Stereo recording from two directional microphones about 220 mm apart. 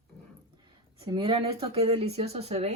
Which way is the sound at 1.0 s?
25° right (ahead or behind).